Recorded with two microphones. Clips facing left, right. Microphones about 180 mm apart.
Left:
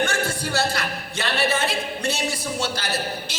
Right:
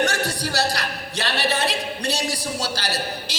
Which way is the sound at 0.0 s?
40° right (ahead or behind).